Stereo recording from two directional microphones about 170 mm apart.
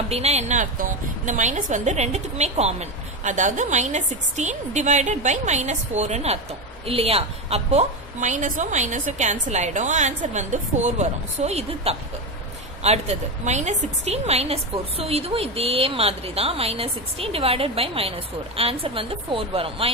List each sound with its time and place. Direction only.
0.1 s a woman's voice: 40° right (ahead or behind)